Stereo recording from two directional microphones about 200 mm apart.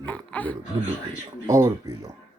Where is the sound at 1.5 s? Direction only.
15° right (ahead or behind).